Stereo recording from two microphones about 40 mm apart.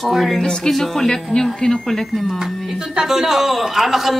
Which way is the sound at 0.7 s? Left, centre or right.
Centre.